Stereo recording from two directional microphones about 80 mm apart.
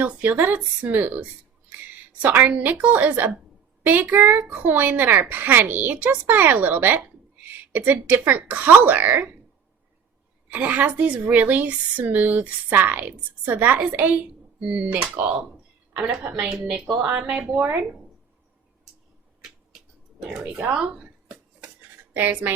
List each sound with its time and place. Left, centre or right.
0.0 s speech: right
2.2 s speech: centre
10.5 s speech: right
20.4 s speech: right
20.7 s a sound: centre